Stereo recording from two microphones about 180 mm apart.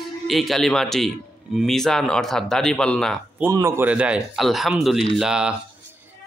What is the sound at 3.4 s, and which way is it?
Speech, 15° right (ahead or behind).